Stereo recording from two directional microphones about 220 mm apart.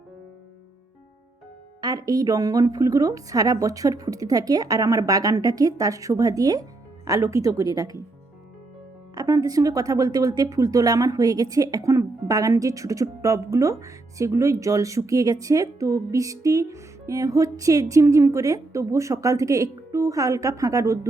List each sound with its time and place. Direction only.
1.8 s speech: 15° right (ahead or behind)
9.1 s speech: 15° right (ahead or behind)